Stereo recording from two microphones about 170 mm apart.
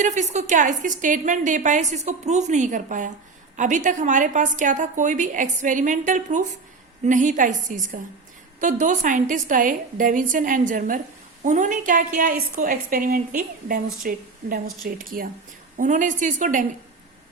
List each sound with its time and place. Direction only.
0.0 s a woman's voice: 45° right (ahead or behind)